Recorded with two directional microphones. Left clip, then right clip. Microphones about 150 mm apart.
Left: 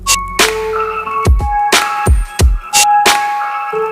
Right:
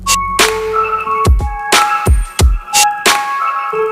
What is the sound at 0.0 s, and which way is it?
Music, centre (ahead or behind).